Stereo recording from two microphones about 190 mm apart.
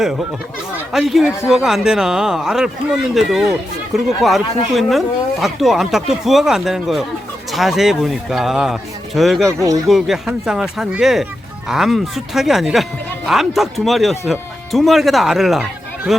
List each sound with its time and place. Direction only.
0.9 s speech: centre (ahead or behind)
9.5 s speech: 15° right (ahead or behind)
9.9 s speech: centre (ahead or behind)